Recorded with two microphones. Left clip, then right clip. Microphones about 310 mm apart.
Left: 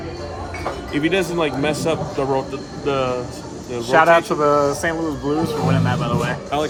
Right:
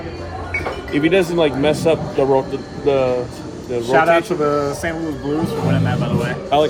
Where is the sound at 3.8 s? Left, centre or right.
Centre.